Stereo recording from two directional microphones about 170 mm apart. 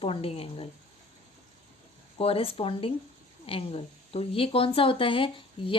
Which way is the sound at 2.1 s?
35° left (ahead or behind).